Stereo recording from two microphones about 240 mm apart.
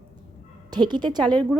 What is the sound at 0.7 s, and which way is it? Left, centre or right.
Speech, centre.